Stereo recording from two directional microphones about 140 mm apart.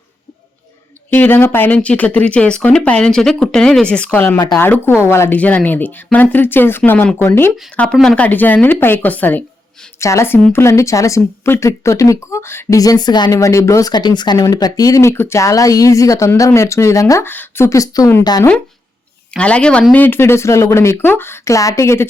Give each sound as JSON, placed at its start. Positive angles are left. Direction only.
{"t": 1.1, "sound": "speech", "side_deg": 15}
{"t": 19.3, "sound": "speech", "side_deg": 10}